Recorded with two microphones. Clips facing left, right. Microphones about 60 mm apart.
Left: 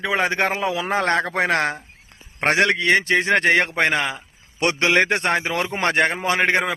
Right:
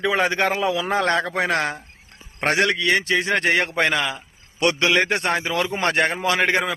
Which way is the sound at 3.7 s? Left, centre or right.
Left.